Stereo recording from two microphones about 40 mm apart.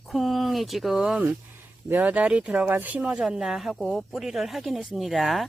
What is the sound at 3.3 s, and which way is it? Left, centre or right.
Speech, centre.